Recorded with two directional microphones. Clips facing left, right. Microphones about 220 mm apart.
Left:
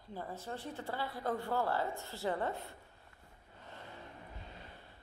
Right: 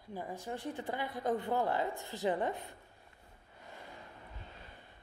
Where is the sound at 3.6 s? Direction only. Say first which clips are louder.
Even; 10° right (ahead or behind).